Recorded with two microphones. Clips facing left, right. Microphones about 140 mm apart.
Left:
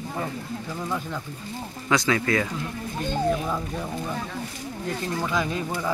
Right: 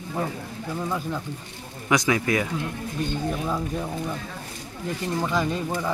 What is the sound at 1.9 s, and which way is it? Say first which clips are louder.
Speech: right 1 dB; 15° right (ahead or behind).